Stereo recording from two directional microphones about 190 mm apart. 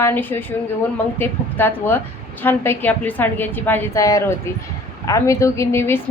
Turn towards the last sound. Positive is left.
turn(degrees=15)  # may be behind; listen again after turning